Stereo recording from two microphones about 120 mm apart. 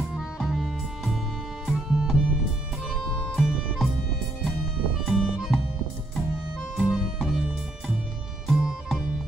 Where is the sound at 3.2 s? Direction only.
Centre (ahead or behind).